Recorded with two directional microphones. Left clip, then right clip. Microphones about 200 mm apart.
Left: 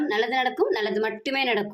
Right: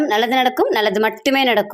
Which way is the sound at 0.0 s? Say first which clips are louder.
Right 8 dB; 40° right (ahead or behind).